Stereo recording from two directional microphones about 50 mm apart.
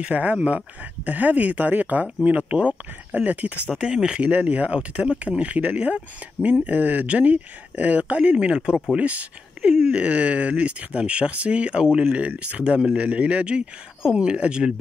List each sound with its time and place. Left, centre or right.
0.0 s speech: right
3.7 s speech: centre
4.3 s speech: right
4.7 s speech: centre
5.2 s speech: right
12.1 s speech: right